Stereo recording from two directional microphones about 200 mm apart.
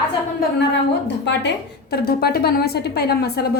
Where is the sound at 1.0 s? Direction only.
60° left (ahead or behind).